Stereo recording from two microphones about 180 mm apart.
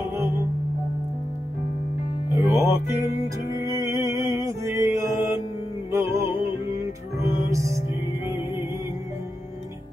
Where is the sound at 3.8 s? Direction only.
15° right (ahead or behind).